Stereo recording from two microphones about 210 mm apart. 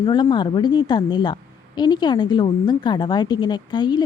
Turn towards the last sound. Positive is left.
turn(degrees=20)  # may be behind; listen again after turning